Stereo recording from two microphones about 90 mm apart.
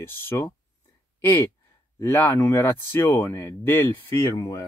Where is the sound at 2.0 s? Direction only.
20° left (ahead or behind).